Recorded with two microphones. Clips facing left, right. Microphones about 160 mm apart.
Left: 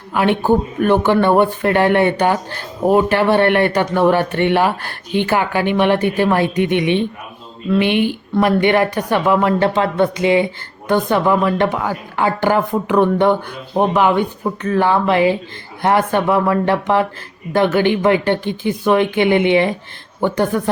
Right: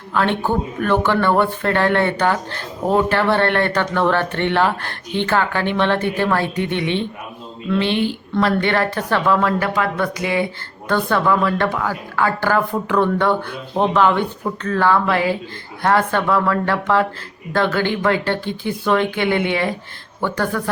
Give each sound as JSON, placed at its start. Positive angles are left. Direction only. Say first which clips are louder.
{"t": 0.1, "sound": "a man's voice", "louder": "left 4 dB", "side_deg": 15}